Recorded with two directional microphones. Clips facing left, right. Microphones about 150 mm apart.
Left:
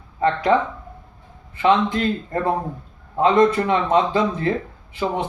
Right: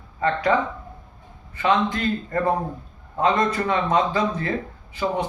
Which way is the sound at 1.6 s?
25° left (ahead or behind).